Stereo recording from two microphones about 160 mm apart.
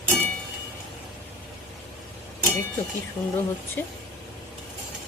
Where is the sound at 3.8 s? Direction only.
15° left (ahead or behind).